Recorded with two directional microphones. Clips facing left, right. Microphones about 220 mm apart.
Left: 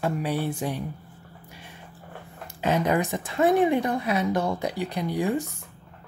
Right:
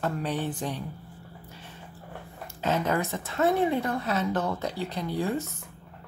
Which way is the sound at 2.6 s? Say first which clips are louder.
Left 3 dB; 15° left (ahead or behind).